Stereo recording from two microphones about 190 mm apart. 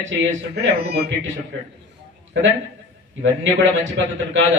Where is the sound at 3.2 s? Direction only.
75° right (ahead or behind).